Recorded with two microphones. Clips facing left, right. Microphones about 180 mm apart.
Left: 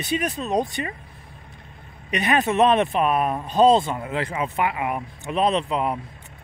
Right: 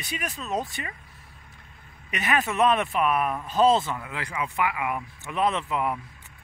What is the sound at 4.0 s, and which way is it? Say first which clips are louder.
Speech: left 6 dB; 30° left (ahead or behind).